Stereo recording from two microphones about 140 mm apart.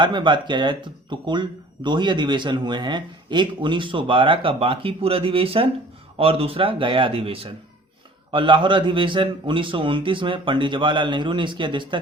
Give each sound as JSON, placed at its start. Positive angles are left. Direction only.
{"t": 0.0, "sound": "speech", "side_deg": -35}